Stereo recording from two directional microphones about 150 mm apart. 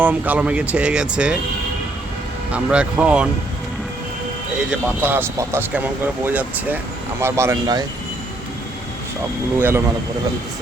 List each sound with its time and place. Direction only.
0.0 s speech: 10° right (ahead or behind)
2.5 s speech: 5° right (ahead or behind)
4.7 s speech: 10° right (ahead or behind)
9.6 s speech: 15° right (ahead or behind)